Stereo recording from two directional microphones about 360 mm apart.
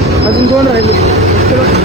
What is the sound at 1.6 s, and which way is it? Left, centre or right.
Speech, centre.